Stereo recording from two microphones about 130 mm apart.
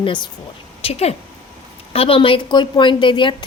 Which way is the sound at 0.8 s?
50° left (ahead or behind).